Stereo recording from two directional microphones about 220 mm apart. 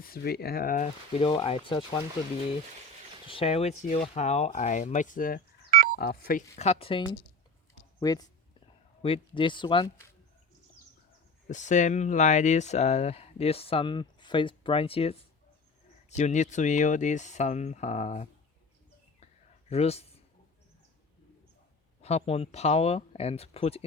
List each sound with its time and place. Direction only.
0.0 s speech: 45° left (ahead or behind)
1.2 s speech: 25° left (ahead or behind)
3.2 s speech: 25° left (ahead or behind)
11.4 s speech: 35° left (ahead or behind)
19.7 s speech: 30° left (ahead or behind)
22.0 s speech: 30° left (ahead or behind)